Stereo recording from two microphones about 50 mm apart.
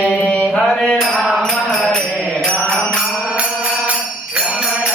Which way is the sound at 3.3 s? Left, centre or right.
Right.